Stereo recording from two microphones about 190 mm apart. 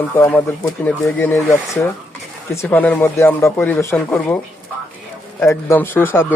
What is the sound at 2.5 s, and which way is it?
Speech, 10° left (ahead or behind).